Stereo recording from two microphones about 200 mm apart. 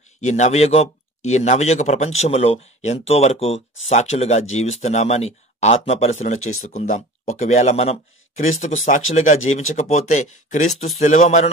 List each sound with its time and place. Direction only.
0.2 s speech: 35° left (ahead or behind)
9.4 s speech: 85° left
9.8 s speech: 35° left (ahead or behind)